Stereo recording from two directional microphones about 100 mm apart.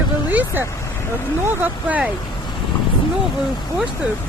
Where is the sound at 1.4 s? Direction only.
15° right (ahead or behind).